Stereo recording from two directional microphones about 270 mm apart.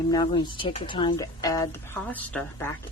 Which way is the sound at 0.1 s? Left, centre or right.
Centre.